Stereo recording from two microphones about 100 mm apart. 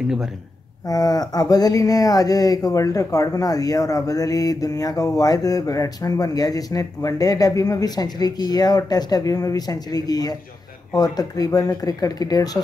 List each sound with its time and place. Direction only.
0.8 s speech: 40° left (ahead or behind)